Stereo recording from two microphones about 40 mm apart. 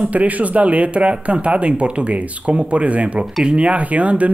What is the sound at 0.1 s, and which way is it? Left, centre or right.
Speech, right.